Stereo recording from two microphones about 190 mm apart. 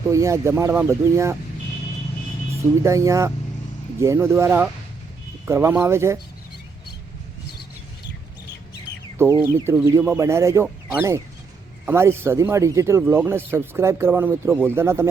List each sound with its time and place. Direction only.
0.1 s speech: 15° right (ahead or behind)
2.8 s speech: 15° right (ahead or behind)
9.1 s speech: 15° right (ahead or behind)